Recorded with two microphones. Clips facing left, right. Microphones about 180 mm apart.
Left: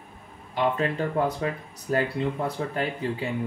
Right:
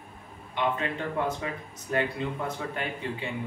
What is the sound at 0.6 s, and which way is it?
Speech, 35° left (ahead or behind).